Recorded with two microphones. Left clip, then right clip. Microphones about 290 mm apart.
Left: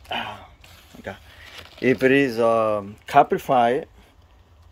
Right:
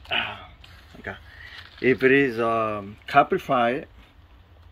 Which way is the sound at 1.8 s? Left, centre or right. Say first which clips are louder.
Left 1 dB; centre.